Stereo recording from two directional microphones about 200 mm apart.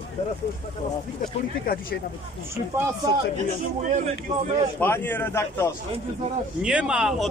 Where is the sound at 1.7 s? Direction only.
45° left (ahead or behind).